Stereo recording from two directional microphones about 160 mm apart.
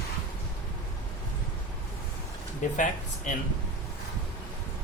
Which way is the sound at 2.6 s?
55° left (ahead or behind).